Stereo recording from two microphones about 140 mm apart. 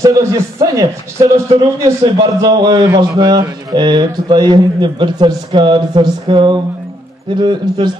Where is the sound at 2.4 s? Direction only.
30° right (ahead or behind).